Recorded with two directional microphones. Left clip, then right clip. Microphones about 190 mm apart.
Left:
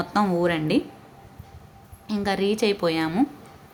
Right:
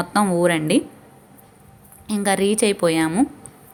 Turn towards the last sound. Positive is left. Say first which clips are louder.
# right 4 dB
turn(degrees=-20)  # may be behind; listen again after turning